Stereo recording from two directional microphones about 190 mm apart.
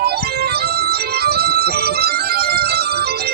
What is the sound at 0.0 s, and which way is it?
Music, 55° right (ahead or behind).